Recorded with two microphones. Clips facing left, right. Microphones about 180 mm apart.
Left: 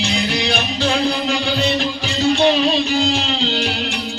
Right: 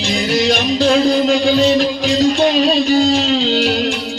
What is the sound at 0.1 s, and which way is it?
Music, 40° right (ahead or behind).